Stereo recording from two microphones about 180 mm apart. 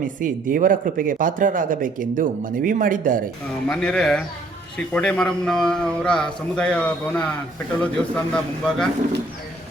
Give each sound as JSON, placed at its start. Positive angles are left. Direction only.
{"t": 0.2, "sound": "speech", "side_deg": -50}
{"t": 3.7, "sound": "a man's voice", "side_deg": 5}